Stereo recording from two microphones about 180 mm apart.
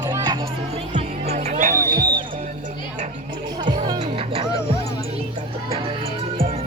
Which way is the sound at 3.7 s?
25° right (ahead or behind).